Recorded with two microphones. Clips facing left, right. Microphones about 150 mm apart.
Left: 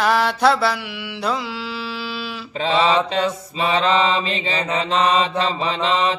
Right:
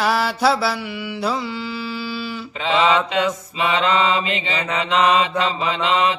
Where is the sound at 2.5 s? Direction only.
35° left (ahead or behind).